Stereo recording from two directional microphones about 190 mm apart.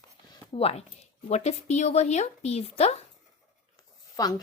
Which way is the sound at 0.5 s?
30° left (ahead or behind).